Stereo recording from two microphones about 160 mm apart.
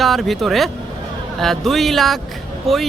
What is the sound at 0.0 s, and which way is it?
Speech, centre (ahead or behind).